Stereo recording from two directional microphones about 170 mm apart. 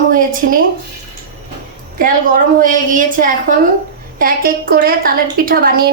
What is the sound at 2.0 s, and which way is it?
A woman's voice, 55° right (ahead or behind).